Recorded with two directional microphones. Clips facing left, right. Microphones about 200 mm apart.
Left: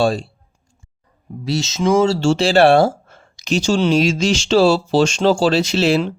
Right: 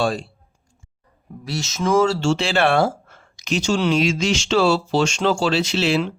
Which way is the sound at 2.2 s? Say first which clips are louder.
Left 6 dB; 35° left (ahead or behind).